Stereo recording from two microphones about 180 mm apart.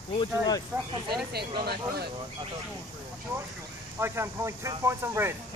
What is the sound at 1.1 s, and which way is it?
Speech, 60° right (ahead or behind).